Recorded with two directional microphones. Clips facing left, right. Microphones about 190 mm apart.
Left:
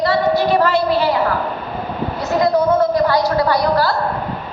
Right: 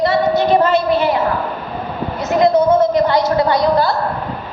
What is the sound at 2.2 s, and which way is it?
A man's voice, 20° right (ahead or behind).